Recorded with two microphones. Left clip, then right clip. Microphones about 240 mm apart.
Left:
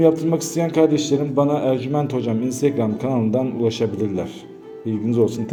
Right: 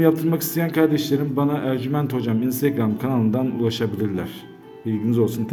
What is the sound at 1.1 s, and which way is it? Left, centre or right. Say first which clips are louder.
Speech: left 4 dB; right.